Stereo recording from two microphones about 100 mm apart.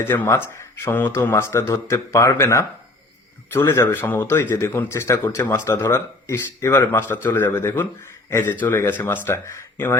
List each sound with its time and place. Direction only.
0.0 s speech: 20° left (ahead or behind)